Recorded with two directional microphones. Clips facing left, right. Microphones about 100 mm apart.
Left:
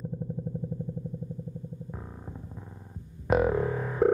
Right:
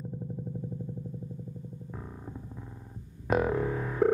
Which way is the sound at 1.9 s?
10° left (ahead or behind).